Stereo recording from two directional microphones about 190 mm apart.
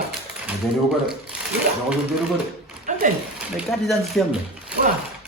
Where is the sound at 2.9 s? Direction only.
40° right (ahead or behind).